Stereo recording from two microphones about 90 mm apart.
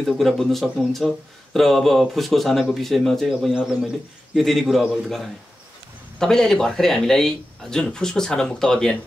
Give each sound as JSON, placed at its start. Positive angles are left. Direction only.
{"t": 0.0, "sound": "speech", "side_deg": 0}
{"t": 4.4, "sound": "speech", "side_deg": 0}